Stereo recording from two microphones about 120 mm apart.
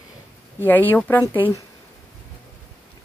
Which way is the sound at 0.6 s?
15° left (ahead or behind).